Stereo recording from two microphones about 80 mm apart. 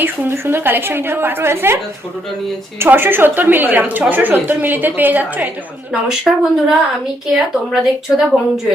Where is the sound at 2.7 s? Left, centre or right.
Right.